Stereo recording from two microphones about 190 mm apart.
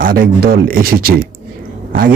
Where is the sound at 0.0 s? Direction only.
50° right (ahead or behind).